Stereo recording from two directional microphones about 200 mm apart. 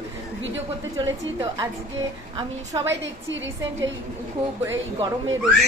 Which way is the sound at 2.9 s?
65° right (ahead or behind).